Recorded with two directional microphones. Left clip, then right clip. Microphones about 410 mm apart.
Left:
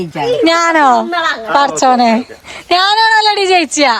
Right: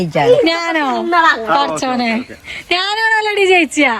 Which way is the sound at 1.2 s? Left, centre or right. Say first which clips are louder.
Right 4 dB; centre.